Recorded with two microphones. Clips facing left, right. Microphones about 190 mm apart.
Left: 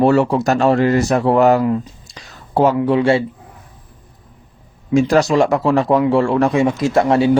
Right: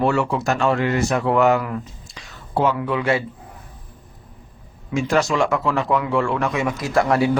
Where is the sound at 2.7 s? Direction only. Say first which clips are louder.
Left 7 dB; 30° left (ahead or behind).